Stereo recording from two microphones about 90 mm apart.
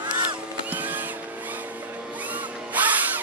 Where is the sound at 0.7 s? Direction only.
20° right (ahead or behind).